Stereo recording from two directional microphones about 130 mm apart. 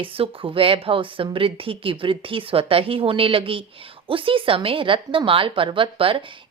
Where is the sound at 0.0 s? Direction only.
45° right (ahead or behind).